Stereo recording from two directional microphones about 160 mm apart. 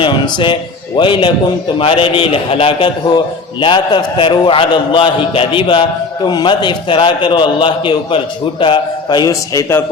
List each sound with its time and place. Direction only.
0.0 s a man's voice: 30° left (ahead or behind)